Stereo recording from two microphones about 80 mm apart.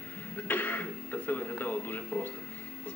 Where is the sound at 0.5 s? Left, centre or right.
Left.